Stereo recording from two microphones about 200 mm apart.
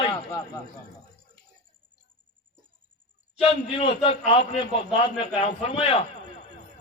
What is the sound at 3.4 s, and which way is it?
A man's voice, 30° left (ahead or behind).